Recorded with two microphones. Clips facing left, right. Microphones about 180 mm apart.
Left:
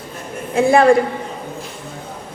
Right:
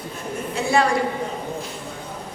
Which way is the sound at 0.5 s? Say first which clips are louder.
Left 9 dB; 55° left (ahead or behind).